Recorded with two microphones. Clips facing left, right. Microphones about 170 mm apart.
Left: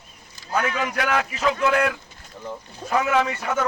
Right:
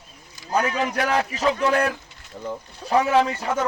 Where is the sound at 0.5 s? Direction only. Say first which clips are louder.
Right 2 dB; 35° right (ahead or behind).